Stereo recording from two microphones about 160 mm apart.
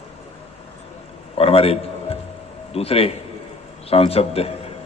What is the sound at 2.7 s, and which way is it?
A man's voice, 40° left (ahead or behind).